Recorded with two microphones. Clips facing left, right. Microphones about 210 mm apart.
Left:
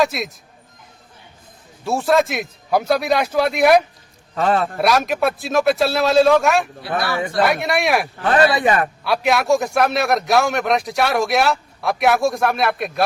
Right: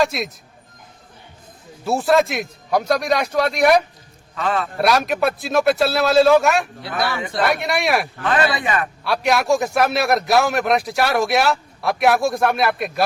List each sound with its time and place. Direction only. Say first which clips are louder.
0.0 s a man's voice: left 1 dB; centre (ahead or behind)
1.8 s a man's voice: even; centre (ahead or behind)
4.4 s speech: left 4 dB; 40° left (ahead or behind)
4.8 s a man's voice: right 4 dB; centre (ahead or behind)
8.2 s speech: left 4 dB; 35° left (ahead or behind)
9.0 s a man's voice: even; centre (ahead or behind)